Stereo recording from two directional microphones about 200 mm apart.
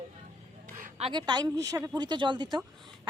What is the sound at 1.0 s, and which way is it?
Speech, 25° right (ahead or behind).